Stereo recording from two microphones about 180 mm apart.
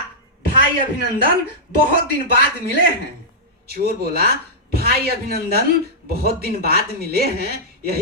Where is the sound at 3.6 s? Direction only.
60° right (ahead or behind).